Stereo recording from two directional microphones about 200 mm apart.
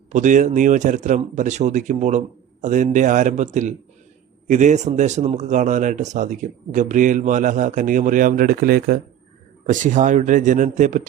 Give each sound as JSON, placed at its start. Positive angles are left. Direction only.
{"t": 0.1, "sound": "a man's voice", "side_deg": -40}